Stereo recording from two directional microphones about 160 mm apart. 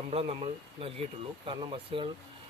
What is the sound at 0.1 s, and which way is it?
Speech, 40° right (ahead or behind).